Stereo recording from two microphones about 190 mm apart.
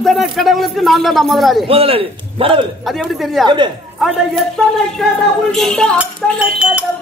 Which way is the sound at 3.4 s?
25° right (ahead or behind).